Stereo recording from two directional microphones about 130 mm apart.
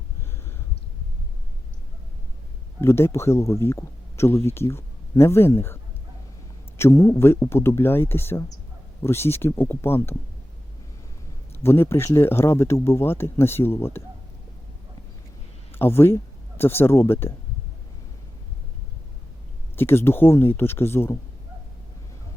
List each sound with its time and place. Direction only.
2.8 s speech: 20° left (ahead or behind)
11.6 s speech: 20° left (ahead or behind)
15.7 s speech: 20° left (ahead or behind)
19.7 s speech: 20° left (ahead or behind)